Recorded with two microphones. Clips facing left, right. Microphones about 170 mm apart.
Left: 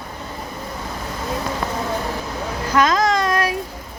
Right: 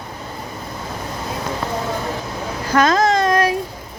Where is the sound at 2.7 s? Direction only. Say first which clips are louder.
Right 2 dB; 45° right (ahead or behind).